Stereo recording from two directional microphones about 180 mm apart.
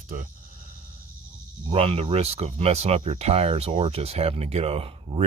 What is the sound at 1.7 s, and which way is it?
Speech, 35° right (ahead or behind).